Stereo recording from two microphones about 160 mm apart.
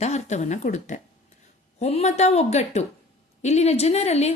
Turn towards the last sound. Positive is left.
turn(degrees=40)  # may be behind; listen again after turning